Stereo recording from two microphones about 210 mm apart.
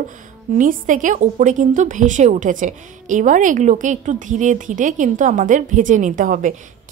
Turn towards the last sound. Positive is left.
turn(degrees=-40)  # may be behind; listen again after turning